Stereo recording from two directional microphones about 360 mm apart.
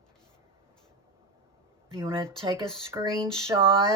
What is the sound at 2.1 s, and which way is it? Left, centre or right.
Speech, centre.